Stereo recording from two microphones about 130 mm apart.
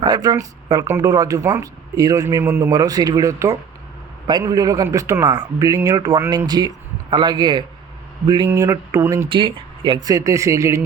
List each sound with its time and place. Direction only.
0.0 s speech: 30° right (ahead or behind)
2.4 s a man's voice: 15° right (ahead or behind)
2.6 s speech: 30° right (ahead or behind)
9.3 s speech: 40° right (ahead or behind); by 10.8 s 20° right (ahead or behind)